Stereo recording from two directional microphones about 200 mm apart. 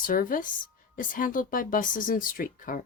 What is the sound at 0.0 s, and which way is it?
Speech, 45° left (ahead or behind).